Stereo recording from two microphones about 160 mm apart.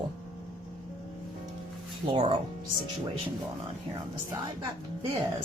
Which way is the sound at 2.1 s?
30° right (ahead or behind).